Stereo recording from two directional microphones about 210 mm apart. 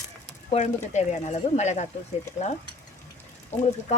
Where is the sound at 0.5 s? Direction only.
30° left (ahead or behind).